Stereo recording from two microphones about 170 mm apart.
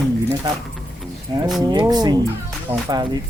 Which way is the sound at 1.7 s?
25° right (ahead or behind).